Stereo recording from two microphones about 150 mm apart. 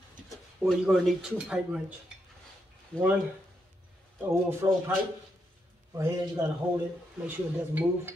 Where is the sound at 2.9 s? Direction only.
10° left (ahead or behind).